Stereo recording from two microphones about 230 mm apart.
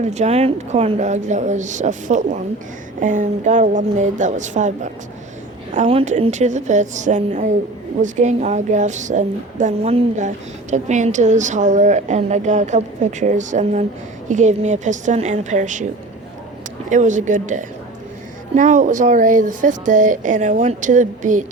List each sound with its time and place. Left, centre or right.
0.0 s a woman's voice: right
16.9 s a woman's voice: right